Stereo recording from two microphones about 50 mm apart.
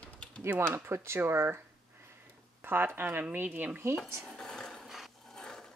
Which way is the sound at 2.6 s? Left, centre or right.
Right.